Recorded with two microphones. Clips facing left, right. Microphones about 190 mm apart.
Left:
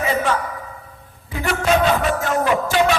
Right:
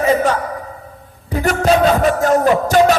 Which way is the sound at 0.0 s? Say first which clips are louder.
Right 5 dB; 40° right (ahead or behind).